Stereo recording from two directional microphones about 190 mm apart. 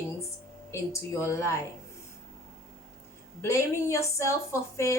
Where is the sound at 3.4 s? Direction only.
15° left (ahead or behind).